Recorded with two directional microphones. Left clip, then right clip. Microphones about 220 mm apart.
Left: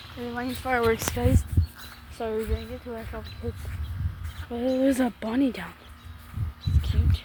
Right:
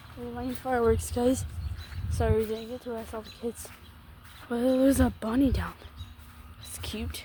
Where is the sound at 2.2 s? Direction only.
25° right (ahead or behind).